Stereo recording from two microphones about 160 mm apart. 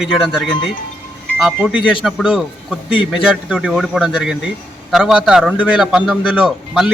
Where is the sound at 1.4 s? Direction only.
5° right (ahead or behind).